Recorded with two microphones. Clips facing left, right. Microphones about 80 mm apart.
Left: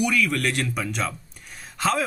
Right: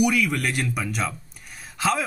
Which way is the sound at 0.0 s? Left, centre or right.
Centre.